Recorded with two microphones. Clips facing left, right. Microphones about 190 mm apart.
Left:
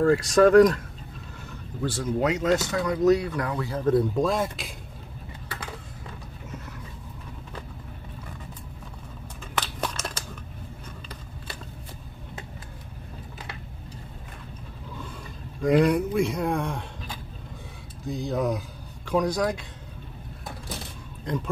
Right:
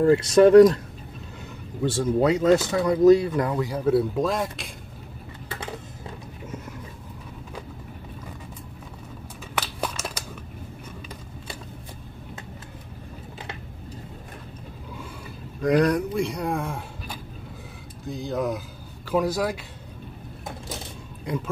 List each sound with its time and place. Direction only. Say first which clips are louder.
0.0 s speech: right 3 dB; 25° right (ahead or behind)
1.8 s speech: right 4 dB; 25° right (ahead or behind)
3.6 s speech: left 3 dB; 10° right (ahead or behind)
9.6 s a sound: right 1 dB; 10° right (ahead or behind)
15.6 s speech: even; centre (ahead or behind)
21.3 s speech: right 1 dB; 10° right (ahead or behind)